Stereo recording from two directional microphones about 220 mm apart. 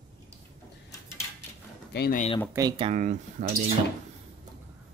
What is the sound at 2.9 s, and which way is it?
Speech, 35° right (ahead or behind).